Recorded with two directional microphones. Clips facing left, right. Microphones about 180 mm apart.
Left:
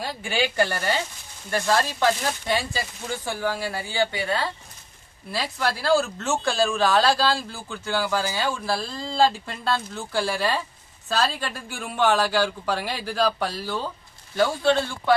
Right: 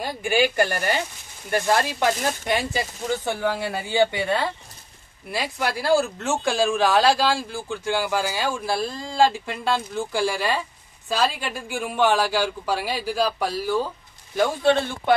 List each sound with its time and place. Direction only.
0.0 s speech: 15° right (ahead or behind)